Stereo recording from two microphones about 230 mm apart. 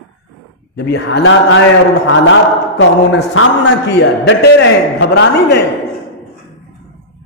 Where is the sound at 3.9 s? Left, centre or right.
Left.